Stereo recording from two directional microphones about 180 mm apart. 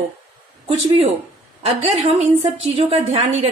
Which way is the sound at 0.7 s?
35° right (ahead or behind).